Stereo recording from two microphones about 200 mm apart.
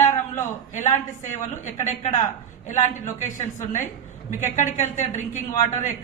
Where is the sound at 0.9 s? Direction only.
35° left (ahead or behind).